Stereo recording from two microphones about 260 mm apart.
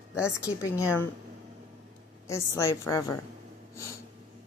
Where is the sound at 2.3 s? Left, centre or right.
Centre.